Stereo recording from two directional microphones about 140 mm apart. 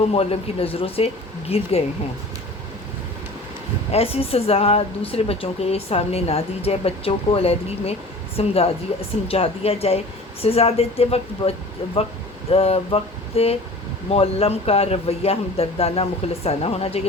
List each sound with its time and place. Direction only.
0.1 s speech: 45° left (ahead or behind)
3.9 s speech: 45° left (ahead or behind)